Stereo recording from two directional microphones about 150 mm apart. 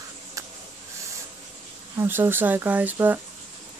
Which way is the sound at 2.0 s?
15° right (ahead or behind).